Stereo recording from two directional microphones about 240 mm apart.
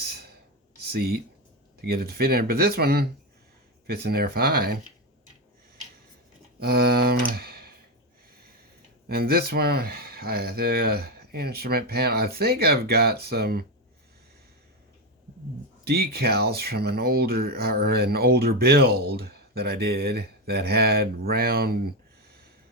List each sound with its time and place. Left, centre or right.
0.9 s speech: right
6.6 s speech: right
9.0 s speech: right
15.8 s speech: right